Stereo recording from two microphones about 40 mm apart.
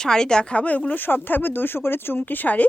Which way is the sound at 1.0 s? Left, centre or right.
Left.